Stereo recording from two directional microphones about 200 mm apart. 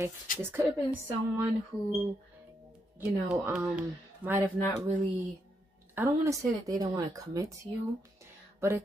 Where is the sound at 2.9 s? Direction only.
5° right (ahead or behind).